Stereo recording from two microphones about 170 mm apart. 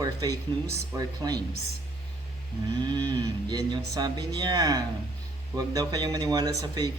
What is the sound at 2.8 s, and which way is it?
Speech, 25° right (ahead or behind).